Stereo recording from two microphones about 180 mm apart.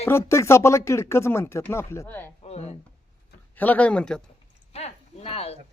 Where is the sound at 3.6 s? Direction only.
10° left (ahead or behind).